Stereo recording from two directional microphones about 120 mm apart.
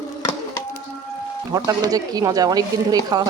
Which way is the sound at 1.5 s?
30° right (ahead or behind).